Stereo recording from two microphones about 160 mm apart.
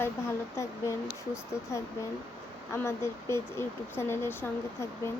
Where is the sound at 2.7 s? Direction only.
15° left (ahead or behind).